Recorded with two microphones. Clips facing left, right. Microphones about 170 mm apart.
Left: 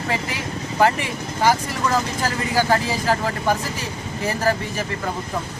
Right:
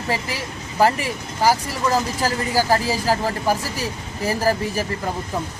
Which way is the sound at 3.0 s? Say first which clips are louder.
Even; 10° right (ahead or behind).